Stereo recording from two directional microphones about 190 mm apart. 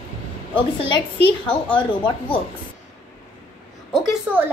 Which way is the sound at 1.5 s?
25° left (ahead or behind).